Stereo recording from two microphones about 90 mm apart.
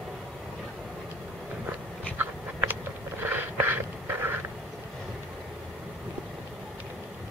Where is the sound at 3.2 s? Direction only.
25° right (ahead or behind).